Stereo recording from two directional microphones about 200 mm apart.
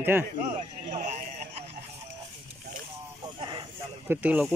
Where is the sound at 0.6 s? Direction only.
40° right (ahead or behind).